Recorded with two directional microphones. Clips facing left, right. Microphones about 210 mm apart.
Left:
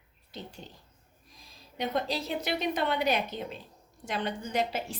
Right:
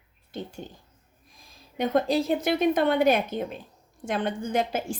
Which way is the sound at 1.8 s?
50° right (ahead or behind).